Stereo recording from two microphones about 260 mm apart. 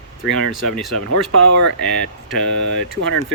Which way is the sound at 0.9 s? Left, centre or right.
Right.